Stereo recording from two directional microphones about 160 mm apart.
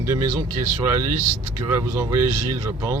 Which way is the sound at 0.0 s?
15° right (ahead or behind).